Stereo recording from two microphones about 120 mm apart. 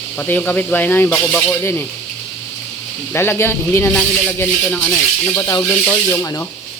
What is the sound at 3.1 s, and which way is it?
Cricket, 20° left (ahead or behind).